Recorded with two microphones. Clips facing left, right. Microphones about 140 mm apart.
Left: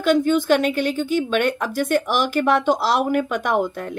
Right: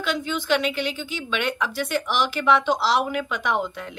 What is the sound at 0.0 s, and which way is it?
A woman's voice, 50° left (ahead or behind).